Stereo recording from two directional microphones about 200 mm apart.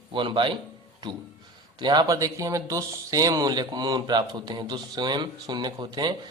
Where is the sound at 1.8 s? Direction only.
20° right (ahead or behind).